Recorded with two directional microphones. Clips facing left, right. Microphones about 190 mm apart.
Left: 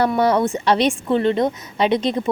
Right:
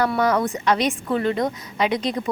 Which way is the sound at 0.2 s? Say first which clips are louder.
Left 3 dB; 30° left (ahead or behind).